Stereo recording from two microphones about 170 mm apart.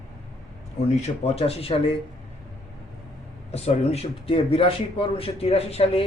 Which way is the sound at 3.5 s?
35° left (ahead or behind).